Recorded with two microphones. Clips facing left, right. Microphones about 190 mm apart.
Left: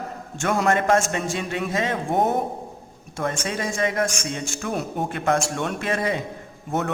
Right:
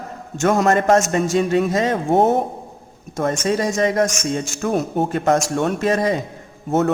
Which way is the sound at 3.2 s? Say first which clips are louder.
Right 7 dB; 40° right (ahead or behind).